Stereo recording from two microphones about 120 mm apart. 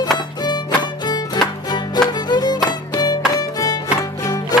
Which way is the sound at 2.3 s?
35° left (ahead or behind).